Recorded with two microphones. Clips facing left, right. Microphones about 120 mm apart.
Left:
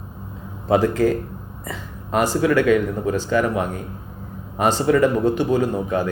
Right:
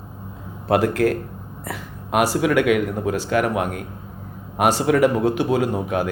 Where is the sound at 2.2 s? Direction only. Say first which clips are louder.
Left 1 dB; 10° right (ahead or behind).